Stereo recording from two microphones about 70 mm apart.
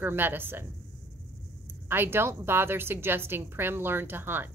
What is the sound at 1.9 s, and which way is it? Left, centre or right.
A woman's voice, right.